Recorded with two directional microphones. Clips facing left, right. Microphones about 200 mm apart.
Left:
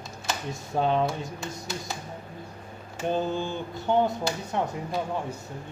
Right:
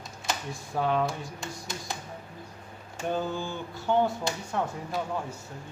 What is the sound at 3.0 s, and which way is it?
Mantra, 20° left (ahead or behind).